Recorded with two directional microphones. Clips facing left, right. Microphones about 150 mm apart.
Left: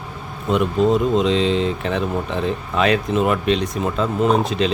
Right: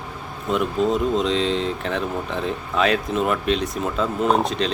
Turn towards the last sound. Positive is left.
turn(degrees=0)  # may be behind; listen again after turning